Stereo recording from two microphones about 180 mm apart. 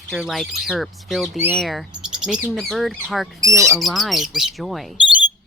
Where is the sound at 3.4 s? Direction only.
20° right (ahead or behind).